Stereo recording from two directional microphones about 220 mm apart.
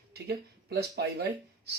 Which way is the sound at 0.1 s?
45° right (ahead or behind).